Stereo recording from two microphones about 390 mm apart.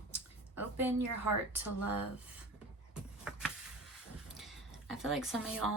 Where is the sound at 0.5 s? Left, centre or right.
Centre.